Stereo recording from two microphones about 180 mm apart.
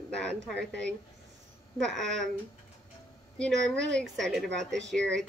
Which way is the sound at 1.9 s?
85° right.